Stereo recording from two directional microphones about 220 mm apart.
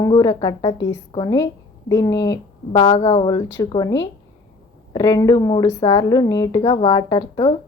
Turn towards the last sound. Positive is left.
turn(degrees=20)  # may be behind; listen again after turning